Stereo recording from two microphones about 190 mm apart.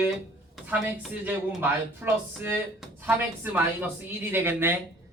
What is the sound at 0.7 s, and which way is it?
Speech, 10° right (ahead or behind).